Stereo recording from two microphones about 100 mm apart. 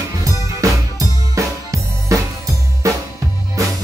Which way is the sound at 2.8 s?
35° right (ahead or behind).